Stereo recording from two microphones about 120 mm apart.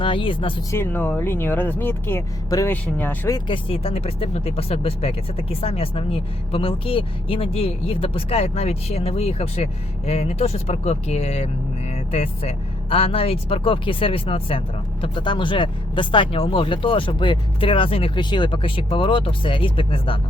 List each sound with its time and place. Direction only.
0.0 s speech: 45° left (ahead or behind)
0.7 s speech: 15° left (ahead or behind)
2.6 s speech: 15° left (ahead or behind)
3.2 s speech: 40° left (ahead or behind)